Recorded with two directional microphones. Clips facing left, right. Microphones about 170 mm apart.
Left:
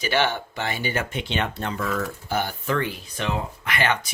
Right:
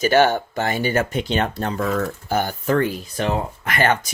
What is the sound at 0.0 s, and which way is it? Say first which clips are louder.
Speech: right 7 dB; 45° right (ahead or behind).